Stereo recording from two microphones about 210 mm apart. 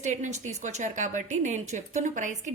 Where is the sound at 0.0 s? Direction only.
35° right (ahead or behind).